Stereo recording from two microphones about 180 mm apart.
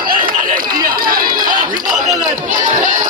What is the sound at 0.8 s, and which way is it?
Run, 55° right (ahead or behind).